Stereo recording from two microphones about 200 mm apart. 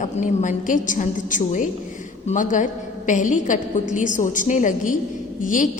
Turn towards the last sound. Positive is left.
turn(degrees=40)  # may be behind; listen again after turning